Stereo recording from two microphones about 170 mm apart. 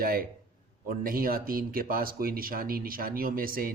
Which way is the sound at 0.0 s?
60° right (ahead or behind).